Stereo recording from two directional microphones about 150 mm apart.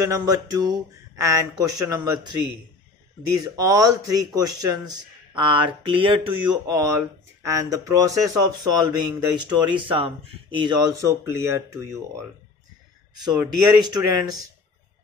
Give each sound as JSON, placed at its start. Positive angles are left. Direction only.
{"t": 0.0, "sound": "a man's voice", "side_deg": -20}
{"t": 3.3, "sound": "a man's voice", "side_deg": -25}
{"t": 13.2, "sound": "a man's voice", "side_deg": -30}